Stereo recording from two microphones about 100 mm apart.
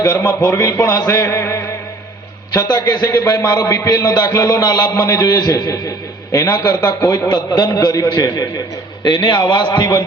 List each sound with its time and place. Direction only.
0.0 s a man's voice: 35° left (ahead or behind)
2.5 s a man's voice: 40° left (ahead or behind)
9.0 s a man's voice: 50° left (ahead or behind)